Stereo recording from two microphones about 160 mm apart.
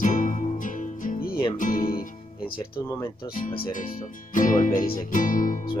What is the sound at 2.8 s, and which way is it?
Speech, 20° left (ahead or behind).